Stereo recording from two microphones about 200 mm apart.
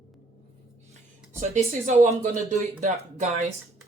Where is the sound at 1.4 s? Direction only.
35° right (ahead or behind).